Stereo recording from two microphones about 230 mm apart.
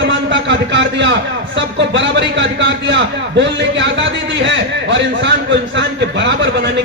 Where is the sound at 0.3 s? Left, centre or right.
Right.